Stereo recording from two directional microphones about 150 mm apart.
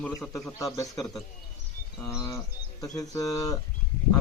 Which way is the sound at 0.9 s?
5° left (ahead or behind).